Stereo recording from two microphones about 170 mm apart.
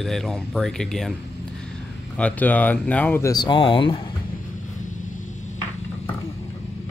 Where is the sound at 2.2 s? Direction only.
10° left (ahead or behind).